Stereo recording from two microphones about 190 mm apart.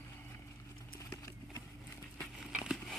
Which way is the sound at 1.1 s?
20° left (ahead or behind).